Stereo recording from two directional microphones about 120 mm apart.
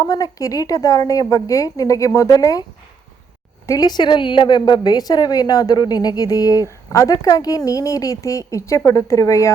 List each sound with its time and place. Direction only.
0.0 s a woman's voice: 30° left (ahead or behind)
3.7 s a woman's voice: 35° left (ahead or behind)